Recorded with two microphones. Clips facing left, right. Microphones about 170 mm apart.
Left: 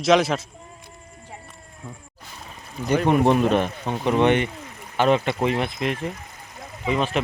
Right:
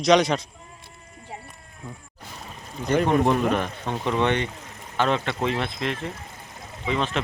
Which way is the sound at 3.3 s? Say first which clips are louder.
Left 3 dB; 25° left (ahead or behind).